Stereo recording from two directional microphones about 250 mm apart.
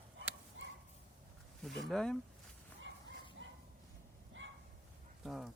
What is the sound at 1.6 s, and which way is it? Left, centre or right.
Speech, centre.